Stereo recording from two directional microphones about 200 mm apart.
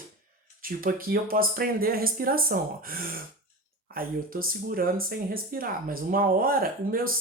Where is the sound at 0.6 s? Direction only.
45° right (ahead or behind).